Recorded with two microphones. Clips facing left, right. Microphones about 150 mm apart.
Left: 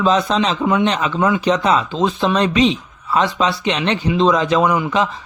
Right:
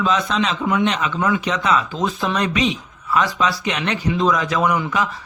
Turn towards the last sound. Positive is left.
turn(degrees=25)  # may be behind; listen again after turning